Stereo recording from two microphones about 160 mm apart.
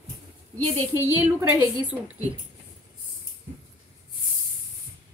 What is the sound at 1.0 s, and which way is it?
Speech, 15° right (ahead or behind).